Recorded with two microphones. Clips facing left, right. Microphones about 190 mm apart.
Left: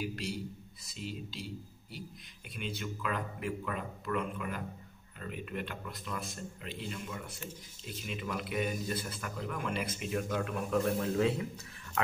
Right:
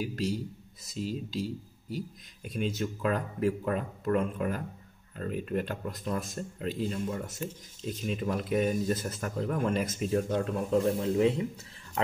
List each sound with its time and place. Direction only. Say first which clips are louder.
0.1 s speech: right 7 dB; 45° right (ahead or behind); by 11.4 s 20° right (ahead or behind)